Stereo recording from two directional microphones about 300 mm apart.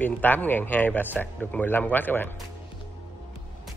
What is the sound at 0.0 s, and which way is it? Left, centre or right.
Speech, centre.